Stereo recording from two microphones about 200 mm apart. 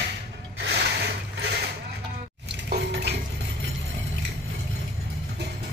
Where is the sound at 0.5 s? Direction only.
60° right (ahead or behind).